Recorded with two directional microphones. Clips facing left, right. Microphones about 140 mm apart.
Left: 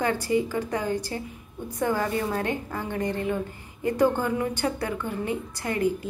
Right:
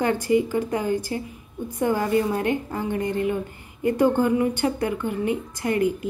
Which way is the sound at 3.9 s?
15° right (ahead or behind).